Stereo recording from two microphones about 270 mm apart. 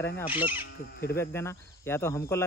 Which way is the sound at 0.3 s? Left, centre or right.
Centre.